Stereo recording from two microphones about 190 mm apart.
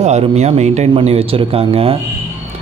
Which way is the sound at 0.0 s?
35° right (ahead or behind).